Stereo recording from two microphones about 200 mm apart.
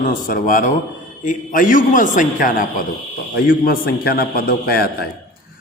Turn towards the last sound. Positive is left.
turn(degrees=50)  # may be behind; listen again after turning